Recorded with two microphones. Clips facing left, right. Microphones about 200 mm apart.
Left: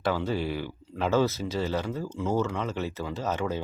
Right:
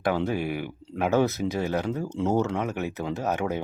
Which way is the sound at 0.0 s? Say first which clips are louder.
Right 2 dB; 15° right (ahead or behind).